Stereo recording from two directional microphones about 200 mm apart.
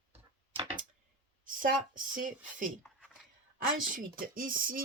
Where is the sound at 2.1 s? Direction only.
40° right (ahead or behind).